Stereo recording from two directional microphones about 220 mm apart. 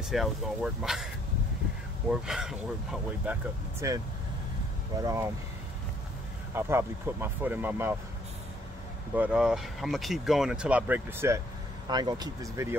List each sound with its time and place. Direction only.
0.1 s speech: centre (ahead or behind)
2.0 s speech: centre (ahead or behind)
3.8 s speech: 15° right (ahead or behind)
5.0 s speech: 10° right (ahead or behind)
6.5 s speech: 10° right (ahead or behind)
9.1 s speech: 5° right (ahead or behind)